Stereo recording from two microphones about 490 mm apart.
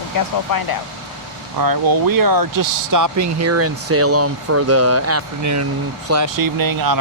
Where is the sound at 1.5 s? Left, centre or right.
Right.